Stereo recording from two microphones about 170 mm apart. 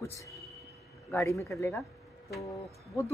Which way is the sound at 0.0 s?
15° left (ahead or behind).